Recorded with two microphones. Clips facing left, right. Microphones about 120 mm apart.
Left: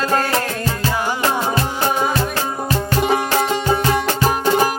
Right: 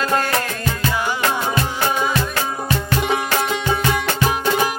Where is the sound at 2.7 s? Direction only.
35° left (ahead or behind).